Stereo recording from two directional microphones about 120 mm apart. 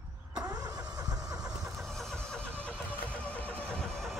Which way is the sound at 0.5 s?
30° right (ahead or behind).